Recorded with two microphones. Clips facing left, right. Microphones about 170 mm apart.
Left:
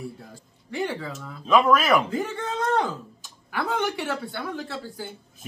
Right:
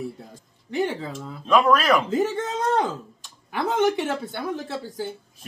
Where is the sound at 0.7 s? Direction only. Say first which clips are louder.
Right 3 dB; 25° right (ahead or behind).